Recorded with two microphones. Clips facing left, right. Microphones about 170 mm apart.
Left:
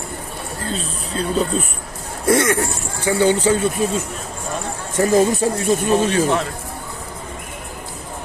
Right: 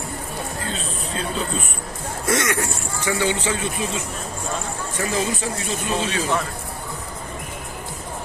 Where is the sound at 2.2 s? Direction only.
30° left (ahead or behind); by 6.3 s 45° left (ahead or behind).